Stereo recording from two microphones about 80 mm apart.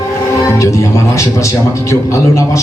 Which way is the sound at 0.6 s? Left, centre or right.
Left.